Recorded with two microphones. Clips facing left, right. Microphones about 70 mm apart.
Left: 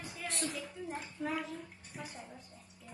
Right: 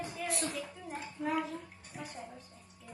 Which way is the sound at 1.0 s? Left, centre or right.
Centre.